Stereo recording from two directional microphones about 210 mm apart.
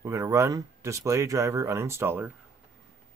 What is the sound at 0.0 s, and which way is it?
Speech, 15° right (ahead or behind).